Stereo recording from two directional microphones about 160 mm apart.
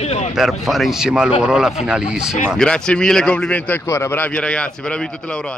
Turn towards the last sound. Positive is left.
turn(degrees=5)  # may be behind; listen again after turning